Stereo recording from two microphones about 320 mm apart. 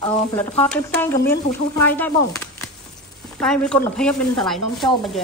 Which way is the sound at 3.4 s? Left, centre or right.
Centre.